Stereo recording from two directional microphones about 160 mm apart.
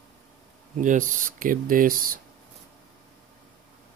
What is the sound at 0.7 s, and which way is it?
Speech, 55° right (ahead or behind).